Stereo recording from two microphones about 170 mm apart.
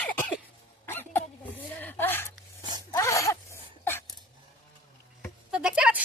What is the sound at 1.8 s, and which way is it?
Gasp, 10° left (ahead or behind).